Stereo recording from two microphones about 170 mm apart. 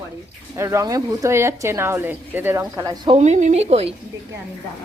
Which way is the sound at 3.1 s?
40° right (ahead or behind).